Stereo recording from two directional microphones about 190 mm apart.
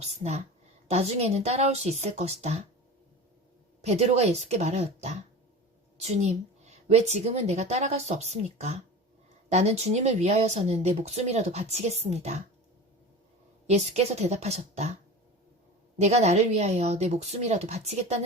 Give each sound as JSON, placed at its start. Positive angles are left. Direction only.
{"t": 0.1, "sound": "speech", "side_deg": -35}
{"t": 3.8, "sound": "speech", "side_deg": -35}
{"t": 13.7, "sound": "speech", "side_deg": -35}
{"t": 16.0, "sound": "speech", "side_deg": -35}